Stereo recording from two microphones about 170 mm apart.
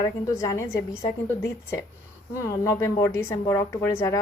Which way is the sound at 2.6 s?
20° left (ahead or behind).